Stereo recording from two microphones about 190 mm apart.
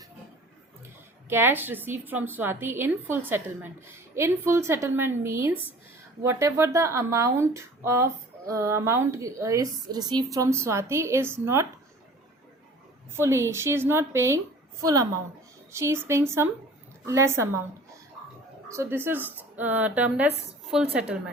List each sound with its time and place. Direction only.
1.3 s a woman's voice: 10° right (ahead or behind)
13.1 s a woman's voice: 15° right (ahead or behind)
18.7 s a woman's voice: 15° right (ahead or behind)